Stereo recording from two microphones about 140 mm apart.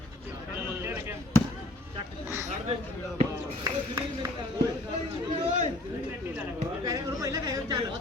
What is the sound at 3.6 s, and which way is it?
Speech, 25° right (ahead or behind).